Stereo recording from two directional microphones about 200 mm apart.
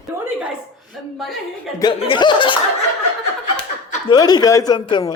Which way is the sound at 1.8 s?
25° left (ahead or behind).